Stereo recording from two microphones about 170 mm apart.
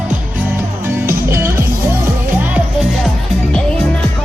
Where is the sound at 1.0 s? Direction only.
15° right (ahead or behind).